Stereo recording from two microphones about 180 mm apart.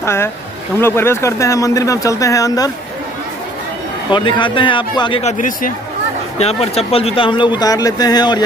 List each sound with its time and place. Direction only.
0.0 s speech: 15° left (ahead or behind)
4.1 s speech: 25° left (ahead or behind)
6.3 s speech: 35° left (ahead or behind)